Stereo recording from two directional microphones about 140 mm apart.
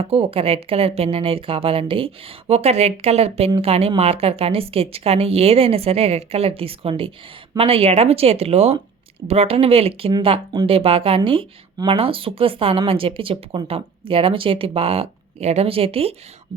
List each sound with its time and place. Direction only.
0.0 s speech: 45° right (ahead or behind)